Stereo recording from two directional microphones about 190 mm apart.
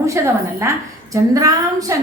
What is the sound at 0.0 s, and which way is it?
A woman's voice, 15° right (ahead or behind).